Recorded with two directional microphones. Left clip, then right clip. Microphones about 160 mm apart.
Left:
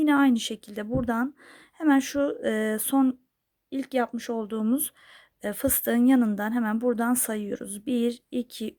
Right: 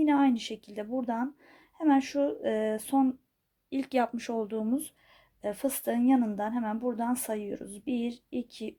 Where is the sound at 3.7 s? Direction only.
20° left (ahead or behind).